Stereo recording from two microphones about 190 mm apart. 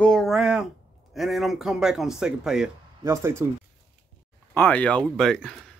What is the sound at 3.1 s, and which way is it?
Speech, 15° right (ahead or behind).